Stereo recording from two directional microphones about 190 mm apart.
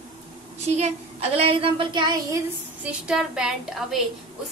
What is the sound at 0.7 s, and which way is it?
A woman's voice, 35° right (ahead or behind).